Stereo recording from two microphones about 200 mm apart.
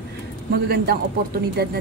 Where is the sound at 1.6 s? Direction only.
50° right (ahead or behind).